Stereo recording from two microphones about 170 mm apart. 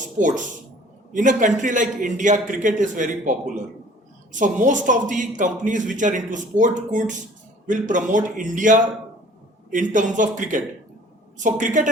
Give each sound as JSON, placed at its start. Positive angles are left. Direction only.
{"t": 0.2, "sound": "speech", "side_deg": -45}